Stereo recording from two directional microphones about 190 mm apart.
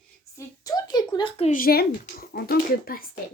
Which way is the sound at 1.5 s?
50° left (ahead or behind).